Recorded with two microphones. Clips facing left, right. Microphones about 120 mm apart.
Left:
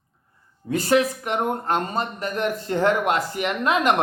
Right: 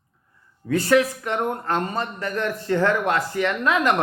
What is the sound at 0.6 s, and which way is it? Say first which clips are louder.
Speech: right 1 dB; 20° left (ahead or behind).